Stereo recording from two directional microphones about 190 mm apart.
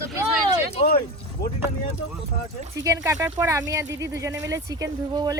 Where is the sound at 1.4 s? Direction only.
55° left (ahead or behind).